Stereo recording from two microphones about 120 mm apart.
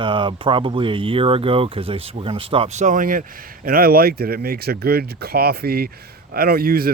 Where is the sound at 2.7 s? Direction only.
90° right.